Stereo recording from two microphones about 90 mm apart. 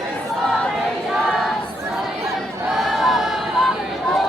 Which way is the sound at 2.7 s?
Centre (ahead or behind).